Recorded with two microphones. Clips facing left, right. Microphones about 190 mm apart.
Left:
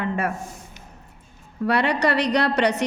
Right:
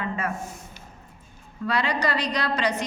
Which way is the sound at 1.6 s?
65° left (ahead or behind).